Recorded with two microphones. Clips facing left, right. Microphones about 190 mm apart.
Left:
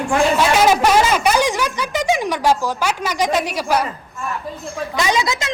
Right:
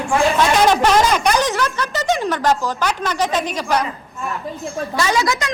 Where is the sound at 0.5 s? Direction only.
5° left (ahead or behind).